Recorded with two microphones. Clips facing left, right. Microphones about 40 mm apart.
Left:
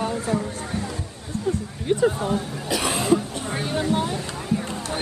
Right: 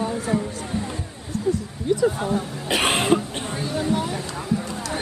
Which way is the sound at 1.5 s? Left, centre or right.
Left.